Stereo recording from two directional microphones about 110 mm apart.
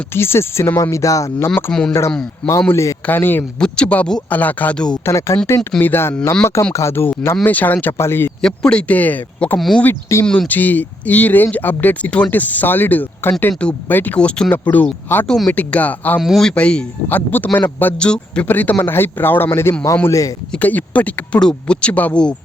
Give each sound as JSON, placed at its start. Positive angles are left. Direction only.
{"t": 0.1, "sound": "speech", "side_deg": 20}
{"t": 1.5, "sound": "a man's voice", "side_deg": 15}
{"t": 5.0, "sound": "a man's voice", "side_deg": 25}
{"t": 8.4, "sound": "a man's voice", "side_deg": 5}
{"t": 9.6, "sound": "speech", "side_deg": 5}
{"t": 9.8, "sound": "speech", "side_deg": 25}
{"t": 10.2, "sound": "a man's voice", "side_deg": 10}
{"t": 16.2, "sound": "a man's voice", "side_deg": 0}
{"t": 20.5, "sound": "a man's voice", "side_deg": 15}